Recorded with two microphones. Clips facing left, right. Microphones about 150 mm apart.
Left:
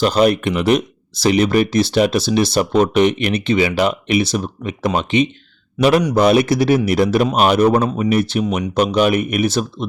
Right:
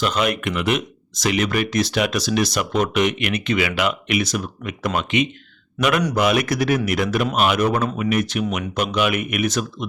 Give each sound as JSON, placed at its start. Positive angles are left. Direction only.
{"t": 0.0, "sound": "speech", "side_deg": 35}